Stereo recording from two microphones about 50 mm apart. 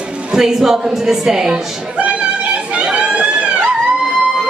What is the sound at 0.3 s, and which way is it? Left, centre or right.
A woman's voice, centre.